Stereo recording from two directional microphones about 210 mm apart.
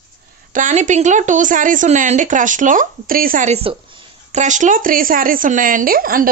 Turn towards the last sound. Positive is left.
turn(degrees=-45)  # may be behind; listen again after turning